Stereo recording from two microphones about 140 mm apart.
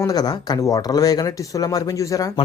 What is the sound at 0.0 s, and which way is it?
Speech, 30° left (ahead or behind).